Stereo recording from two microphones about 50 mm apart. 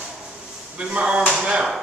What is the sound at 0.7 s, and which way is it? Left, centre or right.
Speech, right.